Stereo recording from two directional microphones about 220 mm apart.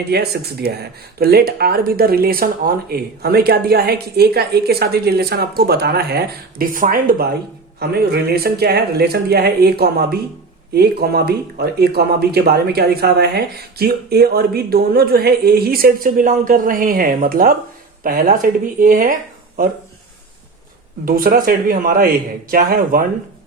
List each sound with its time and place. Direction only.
0.1 s a man's voice: 45° right (ahead or behind)
21.0 s a man's voice: 40° right (ahead or behind)